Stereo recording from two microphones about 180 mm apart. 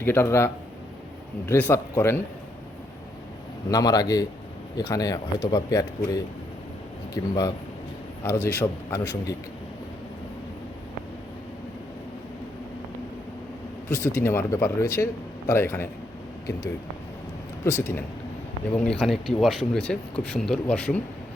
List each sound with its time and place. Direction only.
0.0 s speech: 10° left (ahead or behind)
3.7 s speech: 20° left (ahead or behind)
13.9 s speech: 15° left (ahead or behind)
17.7 s speech: 15° left (ahead or behind)